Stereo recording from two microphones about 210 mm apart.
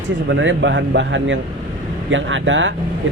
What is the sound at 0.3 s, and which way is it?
Speech, 60° right (ahead or behind).